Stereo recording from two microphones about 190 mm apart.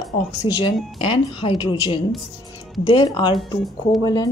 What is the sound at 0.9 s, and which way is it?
Speech, 30° left (ahead or behind).